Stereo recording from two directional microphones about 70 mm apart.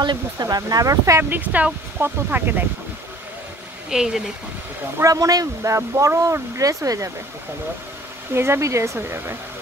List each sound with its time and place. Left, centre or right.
0.0 s speech: right
1.3 s speech: right
3.9 s speech: centre
5.0 s speech: right
8.3 s speech: right